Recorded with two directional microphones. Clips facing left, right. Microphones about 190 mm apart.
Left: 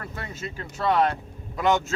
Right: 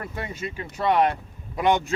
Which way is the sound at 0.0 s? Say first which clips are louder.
Right 3 dB; 15° right (ahead or behind).